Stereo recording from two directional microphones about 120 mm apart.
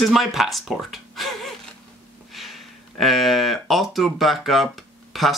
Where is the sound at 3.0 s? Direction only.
Centre (ahead or behind).